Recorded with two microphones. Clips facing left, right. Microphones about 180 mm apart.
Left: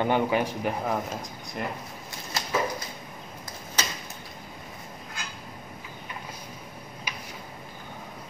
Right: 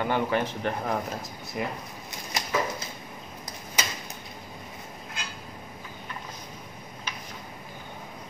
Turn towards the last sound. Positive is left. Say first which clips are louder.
# even
turn(degrees=10)  # may be behind; listen again after turning